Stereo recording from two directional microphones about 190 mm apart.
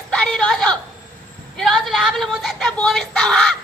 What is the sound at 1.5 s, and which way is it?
Speech, centre (ahead or behind).